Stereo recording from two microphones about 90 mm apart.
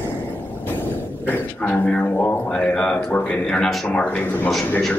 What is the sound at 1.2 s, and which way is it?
Speech, 15° left (ahead or behind).